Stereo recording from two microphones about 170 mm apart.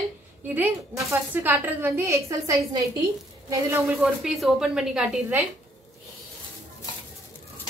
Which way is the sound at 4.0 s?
Centre (ahead or behind).